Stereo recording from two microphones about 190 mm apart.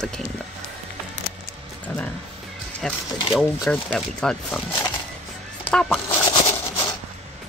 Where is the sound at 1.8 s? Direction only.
5° left (ahead or behind).